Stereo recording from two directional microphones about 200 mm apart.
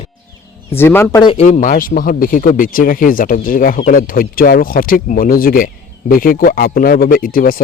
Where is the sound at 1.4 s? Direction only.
40° left (ahead or behind).